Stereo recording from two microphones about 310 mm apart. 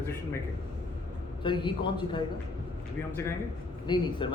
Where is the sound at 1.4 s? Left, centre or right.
Centre.